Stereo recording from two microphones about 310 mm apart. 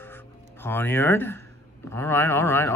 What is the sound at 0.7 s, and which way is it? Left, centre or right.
Speech, centre.